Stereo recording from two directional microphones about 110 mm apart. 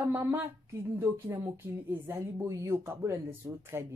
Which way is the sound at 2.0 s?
20° right (ahead or behind).